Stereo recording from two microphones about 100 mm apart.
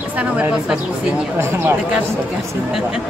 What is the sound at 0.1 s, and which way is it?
Speech, 15° right (ahead or behind).